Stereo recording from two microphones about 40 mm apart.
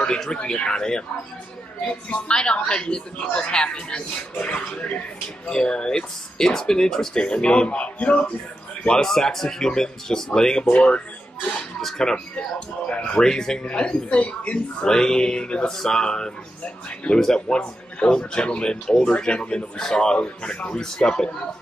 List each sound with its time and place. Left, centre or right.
0.3 s speech: left
2.2 s speech: left
7.2 s speech: left
9.0 s speech: centre
10.7 s speech: left
12.0 s speech: centre
12.4 s speech: left
13.2 s speech: centre
13.7 s speech: left
14.9 s speech: centre